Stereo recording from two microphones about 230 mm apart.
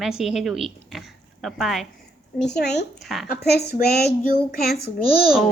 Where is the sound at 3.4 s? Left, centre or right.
Left.